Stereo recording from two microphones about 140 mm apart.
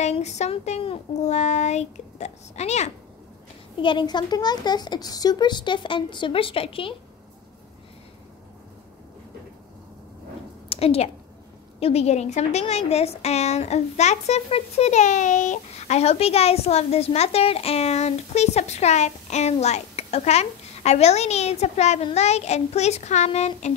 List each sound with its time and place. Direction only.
0.0 s a woman's voice: 55° left (ahead or behind)
3.7 s speech: 35° left (ahead or behind)
10.7 s a woman's voice: 45° left (ahead or behind)